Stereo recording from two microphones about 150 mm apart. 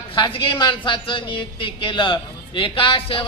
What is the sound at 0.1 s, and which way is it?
A woman's voice, 35° left (ahead or behind).